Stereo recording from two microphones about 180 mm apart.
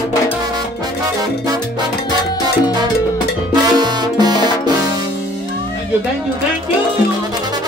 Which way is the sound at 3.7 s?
25° right (ahead or behind).